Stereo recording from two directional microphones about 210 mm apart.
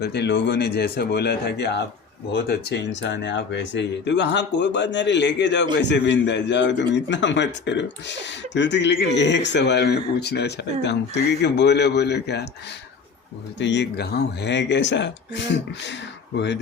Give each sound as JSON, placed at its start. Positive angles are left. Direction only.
{"t": 0.0, "sound": "a man's voice", "side_deg": 55}
{"t": 13.6, "sound": "a man's voice", "side_deg": 55}